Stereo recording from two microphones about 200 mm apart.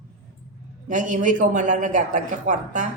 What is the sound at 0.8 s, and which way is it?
A man's voice, 40° right (ahead or behind).